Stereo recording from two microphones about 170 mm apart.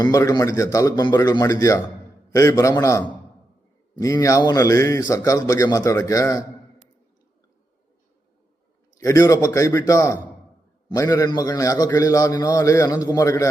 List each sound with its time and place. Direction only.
0.0 s a man's voice: 20° left (ahead or behind)
9.0 s a man's voice: 20° left (ahead or behind)